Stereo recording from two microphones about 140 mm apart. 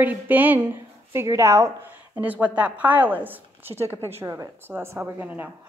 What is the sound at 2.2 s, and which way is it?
Speech, 10° right (ahead or behind).